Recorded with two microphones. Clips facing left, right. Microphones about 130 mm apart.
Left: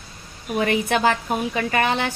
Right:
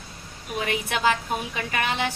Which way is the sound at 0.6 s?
55° left (ahead or behind).